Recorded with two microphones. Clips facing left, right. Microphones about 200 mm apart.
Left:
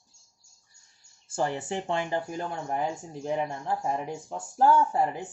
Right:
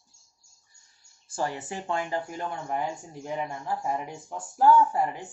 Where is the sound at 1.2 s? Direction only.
25° left (ahead or behind).